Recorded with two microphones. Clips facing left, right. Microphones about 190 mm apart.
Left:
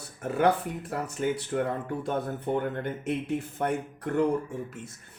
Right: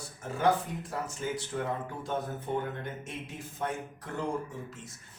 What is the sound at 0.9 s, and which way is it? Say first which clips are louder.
Speech: left 7 dB; 60° left (ahead or behind).